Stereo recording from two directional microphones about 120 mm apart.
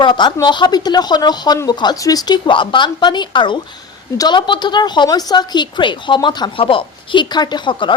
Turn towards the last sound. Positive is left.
turn(degrees=40)  # may be behind; listen again after turning